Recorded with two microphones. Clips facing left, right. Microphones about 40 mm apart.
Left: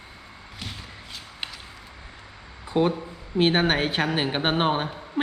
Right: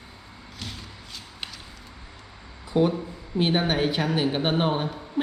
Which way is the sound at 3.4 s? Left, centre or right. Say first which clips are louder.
Left 2 dB; left.